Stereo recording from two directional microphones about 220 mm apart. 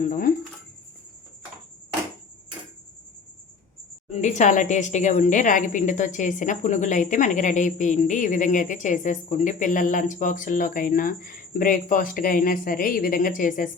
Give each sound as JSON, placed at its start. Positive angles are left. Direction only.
{"t": 0.0, "sound": "a woman's voice", "side_deg": 40}
{"t": 4.1, "sound": "a woman's voice", "side_deg": 30}